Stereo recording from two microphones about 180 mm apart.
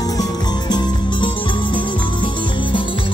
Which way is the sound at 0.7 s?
25° left (ahead or behind).